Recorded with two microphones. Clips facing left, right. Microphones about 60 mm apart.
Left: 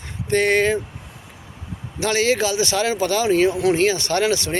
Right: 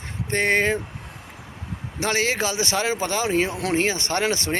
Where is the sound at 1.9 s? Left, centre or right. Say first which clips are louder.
Left 4 dB; right.